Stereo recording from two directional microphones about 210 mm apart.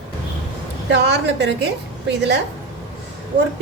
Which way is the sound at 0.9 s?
55° right (ahead or behind).